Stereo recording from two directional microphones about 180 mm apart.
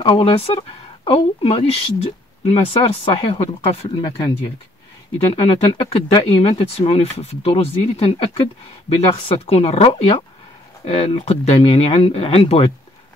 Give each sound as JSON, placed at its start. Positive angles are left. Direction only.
{"t": 0.0, "sound": "speech", "side_deg": 30}
{"t": 5.3, "sound": "speech", "side_deg": 35}